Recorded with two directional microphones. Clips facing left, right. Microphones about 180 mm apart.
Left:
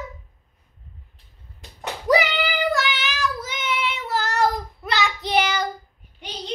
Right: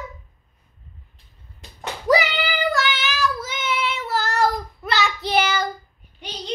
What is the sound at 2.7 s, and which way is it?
Child singing, 15° left (ahead or behind).